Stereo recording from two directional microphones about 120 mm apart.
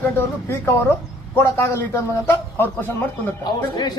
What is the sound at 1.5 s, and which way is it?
A man's voice, 20° left (ahead or behind).